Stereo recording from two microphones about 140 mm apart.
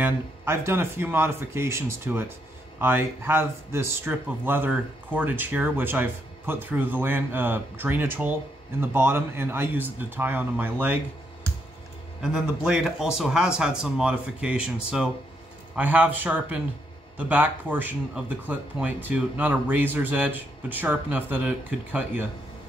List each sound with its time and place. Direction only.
0.0 s speech: 15° right (ahead or behind)
12.2 s speech: 5° right (ahead or behind)